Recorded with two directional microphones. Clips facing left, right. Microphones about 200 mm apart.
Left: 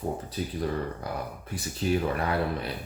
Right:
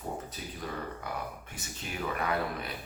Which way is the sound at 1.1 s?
35° left (ahead or behind).